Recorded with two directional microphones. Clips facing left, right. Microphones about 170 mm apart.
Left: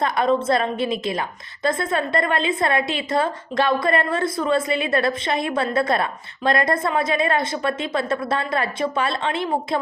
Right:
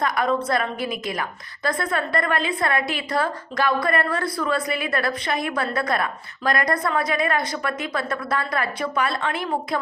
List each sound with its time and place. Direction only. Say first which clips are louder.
0.0 s a woman's voice: left 3 dB; 25° left (ahead or behind)